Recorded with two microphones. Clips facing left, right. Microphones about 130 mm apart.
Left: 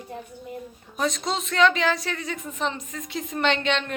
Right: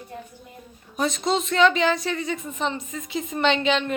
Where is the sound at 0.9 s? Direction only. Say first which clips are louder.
Right 3 dB; centre (ahead or behind).